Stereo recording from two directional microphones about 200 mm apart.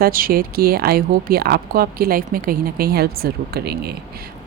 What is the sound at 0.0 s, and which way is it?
Speech, 45° right (ahead or behind).